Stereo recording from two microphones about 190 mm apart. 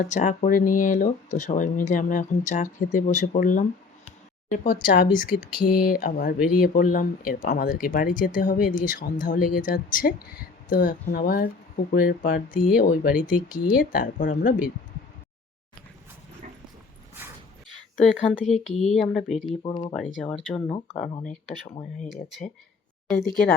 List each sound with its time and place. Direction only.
0.1 s speech: 40° left (ahead or behind)
4.4 s speech: 50° left (ahead or behind)
17.2 s dog: 10° right (ahead or behind)
17.7 s speech: centre (ahead or behind)
19.6 s speech: 20° left (ahead or behind)
19.9 s speech: centre (ahead or behind)
20.7 s speech: 20° left (ahead or behind)
21.2 s speech: 35° left (ahead or behind)
22.1 s speech: centre (ahead or behind)